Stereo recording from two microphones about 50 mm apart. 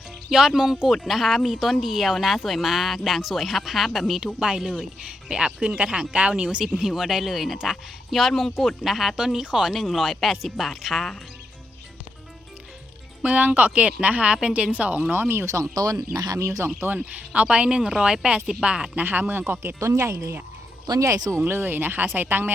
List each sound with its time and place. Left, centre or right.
0.3 s speech: centre
4.4 s speech: centre
6.7 s speech: centre
8.3 s speech: centre
9.7 s speech: centre
13.2 s speech: right
15.1 s speech: right
15.4 s speech: right
16.9 s speech: right
18.9 s speech: right
19.5 s speech: right
19.8 s speech: right
21.0 s speech: right
21.4 s speech: right